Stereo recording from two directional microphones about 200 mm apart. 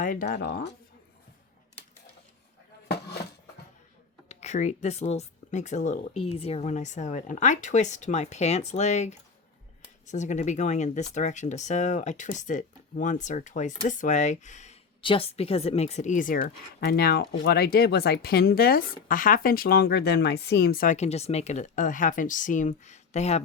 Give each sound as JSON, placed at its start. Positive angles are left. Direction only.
{"t": 0.0, "sound": "speech", "side_deg": 45}
{"t": 4.3, "sound": "speech", "side_deg": 35}